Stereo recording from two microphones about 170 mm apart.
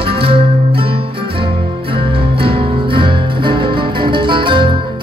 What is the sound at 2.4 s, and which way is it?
Music, 30° right (ahead or behind).